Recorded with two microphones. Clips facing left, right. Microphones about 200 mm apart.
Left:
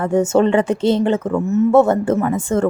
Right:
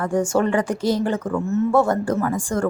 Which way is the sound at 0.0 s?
25° left (ahead or behind).